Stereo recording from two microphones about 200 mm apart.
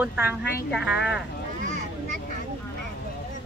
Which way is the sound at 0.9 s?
60° left (ahead or behind).